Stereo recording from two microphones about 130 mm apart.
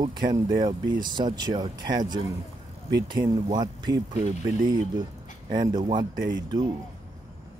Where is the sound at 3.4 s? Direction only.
30° right (ahead or behind).